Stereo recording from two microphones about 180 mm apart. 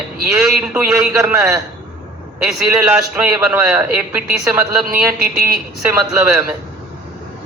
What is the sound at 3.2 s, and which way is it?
Speech, 5° right (ahead or behind).